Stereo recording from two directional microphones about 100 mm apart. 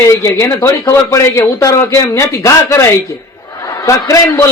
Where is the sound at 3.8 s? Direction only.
30° left (ahead or behind).